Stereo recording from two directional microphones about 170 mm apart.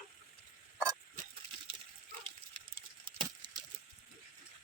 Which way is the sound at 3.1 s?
25° right (ahead or behind).